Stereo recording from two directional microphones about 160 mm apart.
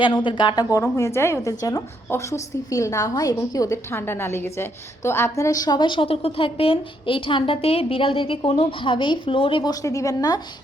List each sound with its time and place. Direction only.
0.0 s a woman's voice: 30° left (ahead or behind)
9.8 s a woman's voice: 20° left (ahead or behind)